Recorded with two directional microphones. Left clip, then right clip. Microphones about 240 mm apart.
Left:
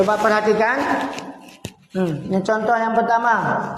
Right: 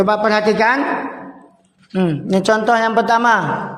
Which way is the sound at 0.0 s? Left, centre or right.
Right.